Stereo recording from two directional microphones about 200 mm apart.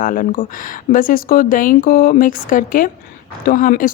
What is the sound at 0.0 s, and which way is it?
A woman's voice, 45° left (ahead or behind).